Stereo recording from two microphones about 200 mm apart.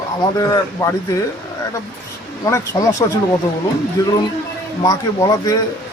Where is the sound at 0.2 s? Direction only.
20° left (ahead or behind).